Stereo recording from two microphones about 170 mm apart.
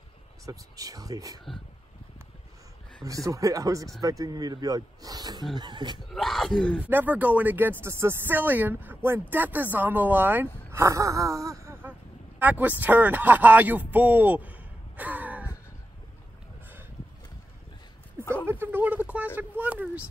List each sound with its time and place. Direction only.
0.5 s speech: 20° right (ahead or behind)
3.0 s speech: 20° right (ahead or behind)
6.1 s speech: centre (ahead or behind)
6.8 s a man's voice: 10° right (ahead or behind)
18.3 s a sound: 15° right (ahead or behind)
19.3 s speech: 10° right (ahead or behind)